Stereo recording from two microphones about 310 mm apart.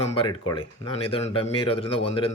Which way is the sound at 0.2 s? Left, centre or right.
Centre.